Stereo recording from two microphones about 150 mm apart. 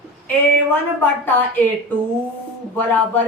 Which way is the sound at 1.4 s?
10° left (ahead or behind).